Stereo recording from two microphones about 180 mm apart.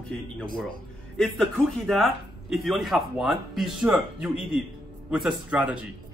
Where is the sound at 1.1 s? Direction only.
5° left (ahead or behind).